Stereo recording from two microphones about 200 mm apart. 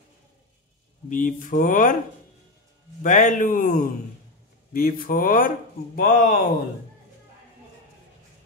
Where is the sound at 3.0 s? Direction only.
40° left (ahead or behind).